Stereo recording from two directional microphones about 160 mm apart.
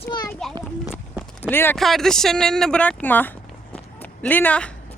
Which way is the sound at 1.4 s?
15° left (ahead or behind).